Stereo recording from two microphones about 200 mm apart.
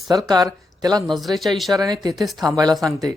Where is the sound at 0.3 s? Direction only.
20° right (ahead or behind).